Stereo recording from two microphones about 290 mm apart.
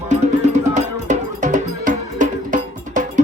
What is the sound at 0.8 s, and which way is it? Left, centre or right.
Music, right.